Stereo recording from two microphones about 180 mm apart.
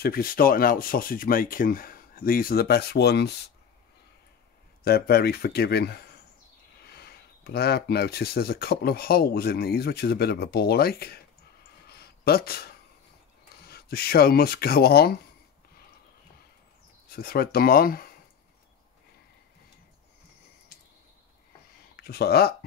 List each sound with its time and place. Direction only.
0.0 s speech: 55° left (ahead or behind)
4.8 s speech: 60° left (ahead or behind)
11.9 s a sound: 60° left (ahead or behind)
13.7 s speech: 60° left (ahead or behind)
17.1 s speech: 55° left (ahead or behind)
21.9 s speech: 60° left (ahead or behind)